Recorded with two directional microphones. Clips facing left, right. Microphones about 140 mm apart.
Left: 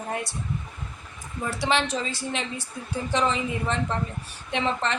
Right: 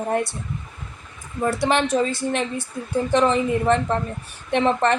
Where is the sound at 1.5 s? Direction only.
50° right (ahead or behind).